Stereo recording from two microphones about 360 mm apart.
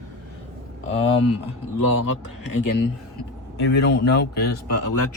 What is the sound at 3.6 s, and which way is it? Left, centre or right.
Speech, left.